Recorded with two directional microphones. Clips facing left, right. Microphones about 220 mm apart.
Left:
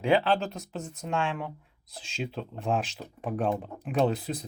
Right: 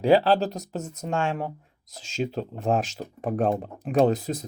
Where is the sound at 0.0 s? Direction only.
35° right (ahead or behind).